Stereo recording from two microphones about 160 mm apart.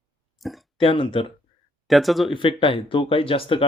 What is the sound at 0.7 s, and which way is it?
Speech, 30° left (ahead or behind).